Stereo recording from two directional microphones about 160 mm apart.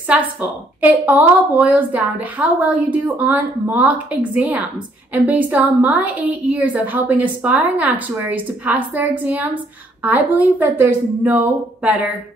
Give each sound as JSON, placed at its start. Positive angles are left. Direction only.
{"t": 0.1, "sound": "a woman's voice", "side_deg": -10}